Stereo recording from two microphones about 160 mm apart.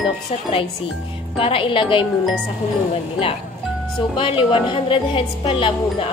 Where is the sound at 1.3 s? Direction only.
35° left (ahead or behind).